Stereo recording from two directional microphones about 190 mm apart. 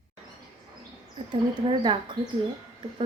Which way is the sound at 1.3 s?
25° right (ahead or behind).